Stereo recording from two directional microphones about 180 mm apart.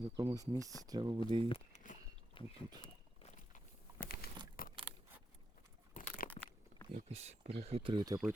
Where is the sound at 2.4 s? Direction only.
30° left (ahead or behind).